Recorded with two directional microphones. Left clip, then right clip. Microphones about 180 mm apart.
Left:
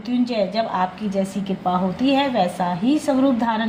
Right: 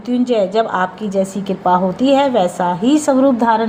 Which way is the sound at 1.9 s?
30° right (ahead or behind).